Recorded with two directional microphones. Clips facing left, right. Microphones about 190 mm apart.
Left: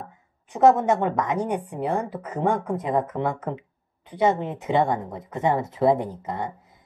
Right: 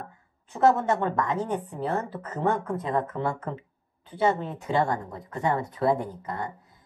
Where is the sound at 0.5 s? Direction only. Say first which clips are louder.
Left 4 dB; 20° left (ahead or behind).